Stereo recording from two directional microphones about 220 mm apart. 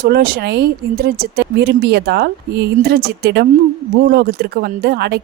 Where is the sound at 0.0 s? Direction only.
45° right (ahead or behind).